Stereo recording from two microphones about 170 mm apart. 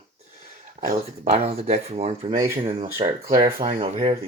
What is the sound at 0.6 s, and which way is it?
Speech, 45° right (ahead or behind).